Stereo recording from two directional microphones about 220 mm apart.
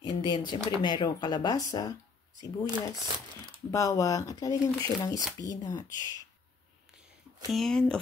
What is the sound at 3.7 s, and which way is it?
Speech, 15° left (ahead or behind).